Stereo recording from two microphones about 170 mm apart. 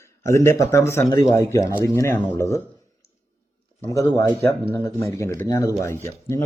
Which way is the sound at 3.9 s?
20° left (ahead or behind).